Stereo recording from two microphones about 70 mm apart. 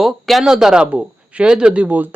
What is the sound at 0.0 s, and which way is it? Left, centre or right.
Speech, centre.